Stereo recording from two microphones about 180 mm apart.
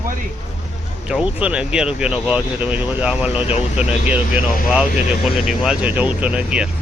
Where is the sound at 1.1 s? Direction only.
5° right (ahead or behind).